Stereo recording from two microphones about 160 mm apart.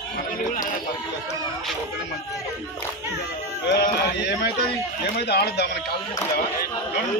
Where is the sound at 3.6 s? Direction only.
80° left.